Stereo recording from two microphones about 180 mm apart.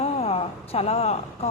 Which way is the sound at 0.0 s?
35° left (ahead or behind).